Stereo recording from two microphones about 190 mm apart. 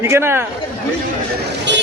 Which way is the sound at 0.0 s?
15° right (ahead or behind).